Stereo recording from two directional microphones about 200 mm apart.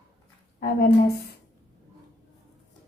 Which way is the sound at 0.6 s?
50° left (ahead or behind).